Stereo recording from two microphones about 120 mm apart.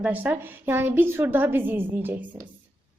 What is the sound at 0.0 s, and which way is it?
A woman's voice, 15° right (ahead or behind).